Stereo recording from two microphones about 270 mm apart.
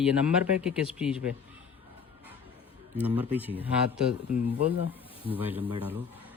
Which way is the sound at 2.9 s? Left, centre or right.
Centre.